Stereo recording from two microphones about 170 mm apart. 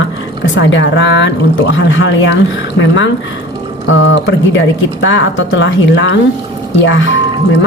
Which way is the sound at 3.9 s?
90° left.